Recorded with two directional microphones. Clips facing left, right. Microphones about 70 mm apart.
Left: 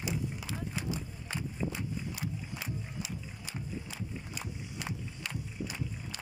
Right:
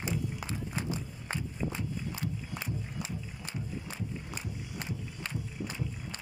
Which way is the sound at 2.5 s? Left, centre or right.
Right.